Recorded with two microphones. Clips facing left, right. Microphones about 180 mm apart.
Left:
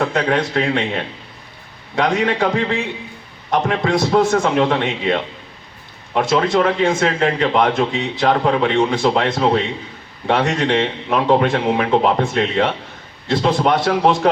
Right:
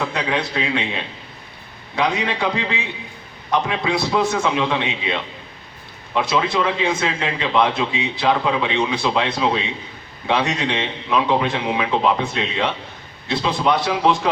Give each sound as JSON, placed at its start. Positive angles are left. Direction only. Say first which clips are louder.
{"t": 0.0, "sound": "a man's voice", "louder": "left 5 dB", "side_deg": 50}